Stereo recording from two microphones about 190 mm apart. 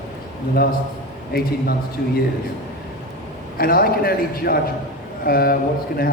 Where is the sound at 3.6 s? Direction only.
50° left (ahead or behind).